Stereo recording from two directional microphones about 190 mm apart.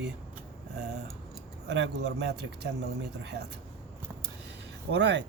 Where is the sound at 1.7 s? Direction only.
70° right (ahead or behind).